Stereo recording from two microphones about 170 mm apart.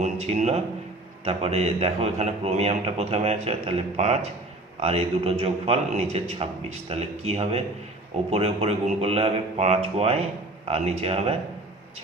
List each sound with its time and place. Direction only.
0.0 s a man's voice: 40° right (ahead or behind)